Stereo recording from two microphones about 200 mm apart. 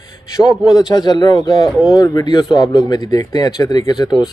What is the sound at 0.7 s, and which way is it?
Speech, 20° left (ahead or behind).